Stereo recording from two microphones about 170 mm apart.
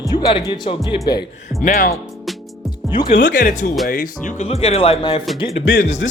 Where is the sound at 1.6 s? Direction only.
55° left (ahead or behind).